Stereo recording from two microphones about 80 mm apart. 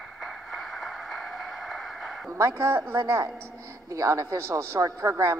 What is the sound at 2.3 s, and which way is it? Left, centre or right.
A woman's voice, right.